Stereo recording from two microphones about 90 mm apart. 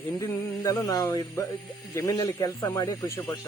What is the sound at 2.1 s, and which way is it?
Speech, 40° left (ahead or behind).